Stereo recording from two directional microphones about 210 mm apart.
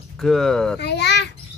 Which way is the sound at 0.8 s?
55° left (ahead or behind).